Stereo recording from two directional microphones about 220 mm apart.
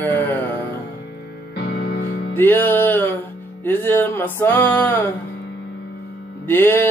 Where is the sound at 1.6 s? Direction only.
45° left (ahead or behind).